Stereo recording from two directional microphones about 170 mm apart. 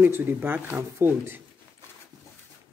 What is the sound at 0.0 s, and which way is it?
Speech, 10° right (ahead or behind).